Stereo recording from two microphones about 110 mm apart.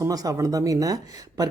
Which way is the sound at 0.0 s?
30° right (ahead or behind).